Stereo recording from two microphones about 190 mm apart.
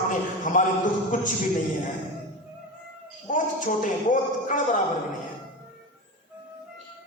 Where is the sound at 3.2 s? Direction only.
45° left (ahead or behind).